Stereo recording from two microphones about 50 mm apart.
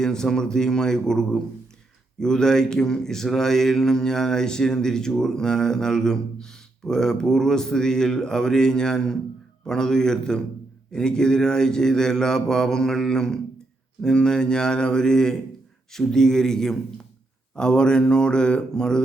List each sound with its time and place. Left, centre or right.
0.0 s speech: centre